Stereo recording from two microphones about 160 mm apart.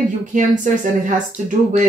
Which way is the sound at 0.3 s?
55° right (ahead or behind).